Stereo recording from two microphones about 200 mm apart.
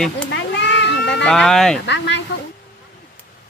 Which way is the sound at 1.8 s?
65° left (ahead or behind).